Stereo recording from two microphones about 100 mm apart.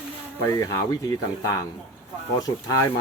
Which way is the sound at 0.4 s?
35° left (ahead or behind).